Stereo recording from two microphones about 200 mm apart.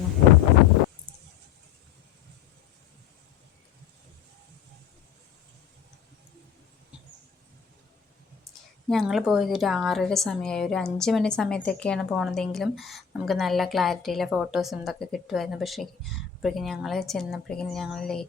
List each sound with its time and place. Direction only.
8.9 s speech: centre (ahead or behind)